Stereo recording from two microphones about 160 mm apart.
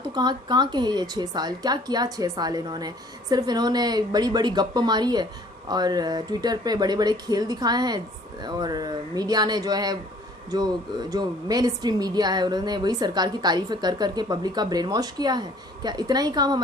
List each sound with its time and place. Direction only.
0.1 s a woman's voice: 25° right (ahead or behind)
11.1 s a woman's voice: 25° right (ahead or behind)